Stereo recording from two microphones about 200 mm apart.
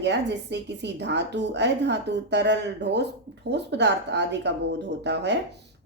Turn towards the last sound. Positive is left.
turn(degrees=-60)  # may be behind; listen again after turning